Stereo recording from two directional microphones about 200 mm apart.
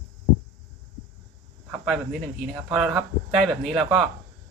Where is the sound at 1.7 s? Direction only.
5° right (ahead or behind).